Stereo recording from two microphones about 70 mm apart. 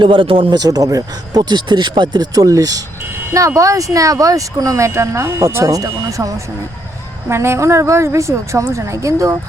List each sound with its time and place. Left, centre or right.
0.5 s speech: right
3.3 s speech: right
5.7 s speech: right